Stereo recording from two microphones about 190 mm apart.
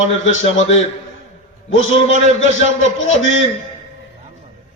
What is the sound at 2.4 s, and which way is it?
Speech, 90° left.